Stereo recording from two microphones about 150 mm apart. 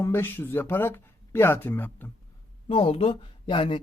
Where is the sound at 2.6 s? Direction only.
40° left (ahead or behind).